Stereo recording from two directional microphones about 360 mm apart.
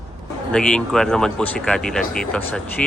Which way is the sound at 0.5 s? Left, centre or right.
Centre.